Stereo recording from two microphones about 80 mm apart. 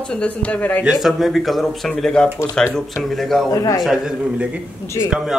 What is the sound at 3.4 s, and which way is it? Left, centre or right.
Speech, left.